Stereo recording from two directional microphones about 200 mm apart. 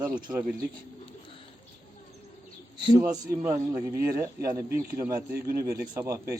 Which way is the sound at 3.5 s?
15° right (ahead or behind).